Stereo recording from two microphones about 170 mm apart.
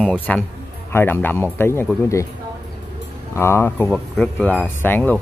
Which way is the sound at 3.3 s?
15° left (ahead or behind).